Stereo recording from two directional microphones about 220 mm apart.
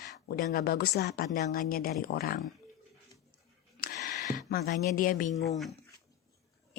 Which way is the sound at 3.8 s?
40° left (ahead or behind).